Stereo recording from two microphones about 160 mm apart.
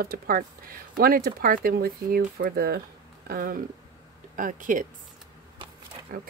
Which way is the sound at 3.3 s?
65° right (ahead or behind).